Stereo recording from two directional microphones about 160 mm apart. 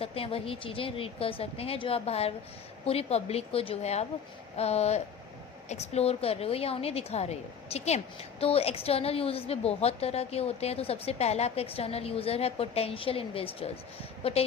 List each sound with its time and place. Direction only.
0.0 s a woman's voice: 35° left (ahead or behind)